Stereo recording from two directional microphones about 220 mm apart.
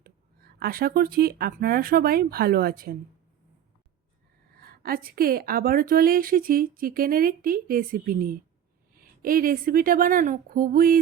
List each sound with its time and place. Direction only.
0.0 s speech: 45° right (ahead or behind)
4.6 s a woman's voice: 45° right (ahead or behind)